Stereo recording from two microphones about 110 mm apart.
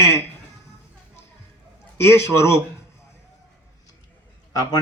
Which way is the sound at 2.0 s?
25° left (ahead or behind).